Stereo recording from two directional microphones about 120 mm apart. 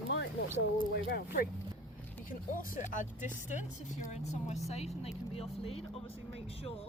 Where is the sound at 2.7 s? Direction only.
90° left.